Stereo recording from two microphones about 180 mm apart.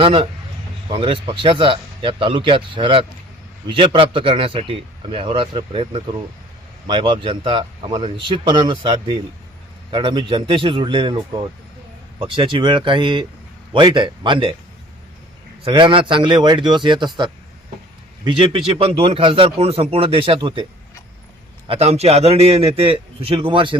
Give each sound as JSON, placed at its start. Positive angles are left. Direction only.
{"t": 0.0, "sound": "a man's voice", "side_deg": -30}
{"t": 15.6, "sound": "a man's voice", "side_deg": -30}
{"t": 18.3, "sound": "a man's voice", "side_deg": -30}
{"t": 21.7, "sound": "a man's voice", "side_deg": -35}